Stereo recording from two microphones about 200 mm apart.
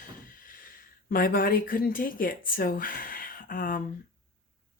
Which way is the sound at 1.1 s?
45° left (ahead or behind).